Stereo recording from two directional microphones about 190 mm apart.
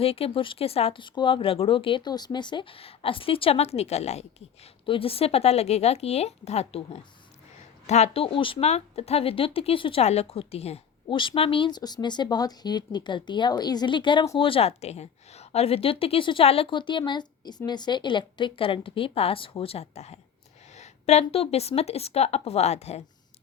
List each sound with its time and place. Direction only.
0.0 s speech: 30° left (ahead or behind)